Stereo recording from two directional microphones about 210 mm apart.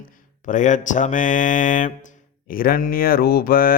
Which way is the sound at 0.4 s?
35° left (ahead or behind).